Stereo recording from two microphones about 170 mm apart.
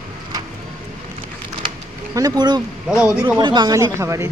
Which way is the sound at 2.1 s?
25° right (ahead or behind).